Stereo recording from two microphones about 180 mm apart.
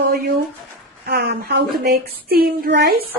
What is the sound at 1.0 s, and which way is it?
A woman's voice, 65° right (ahead or behind).